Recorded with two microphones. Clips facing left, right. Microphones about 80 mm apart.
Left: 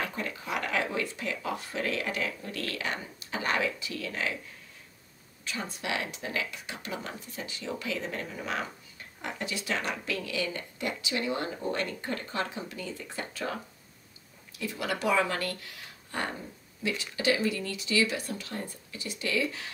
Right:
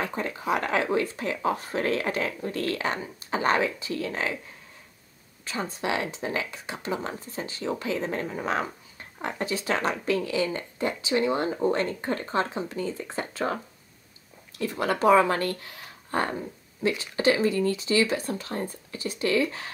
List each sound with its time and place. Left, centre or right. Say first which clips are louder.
0.0 s speech: right 5 dB; right
5.4 s speech: right 6 dB; right
14.6 s speech: right 7 dB; right